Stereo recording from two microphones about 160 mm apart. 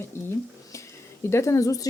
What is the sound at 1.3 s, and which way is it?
Speech, 15° left (ahead or behind).